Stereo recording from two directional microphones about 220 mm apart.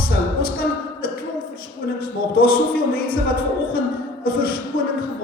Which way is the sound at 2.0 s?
45° left (ahead or behind).